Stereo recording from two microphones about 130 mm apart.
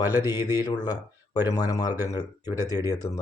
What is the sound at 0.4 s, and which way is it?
Speech, 30° left (ahead or behind).